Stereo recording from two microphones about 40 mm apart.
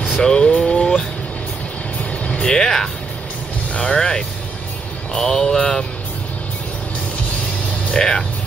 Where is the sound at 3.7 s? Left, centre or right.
Left.